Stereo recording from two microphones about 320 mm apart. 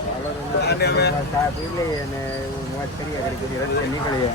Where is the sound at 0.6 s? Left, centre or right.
Left.